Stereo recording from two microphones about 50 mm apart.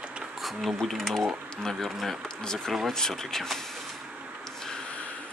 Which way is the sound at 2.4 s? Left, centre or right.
Centre.